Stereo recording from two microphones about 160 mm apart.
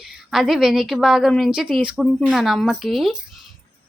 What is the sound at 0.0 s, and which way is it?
A woman's voice, centre (ahead or behind).